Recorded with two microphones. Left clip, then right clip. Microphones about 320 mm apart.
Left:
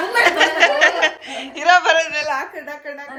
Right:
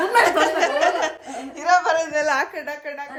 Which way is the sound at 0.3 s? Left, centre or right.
Centre.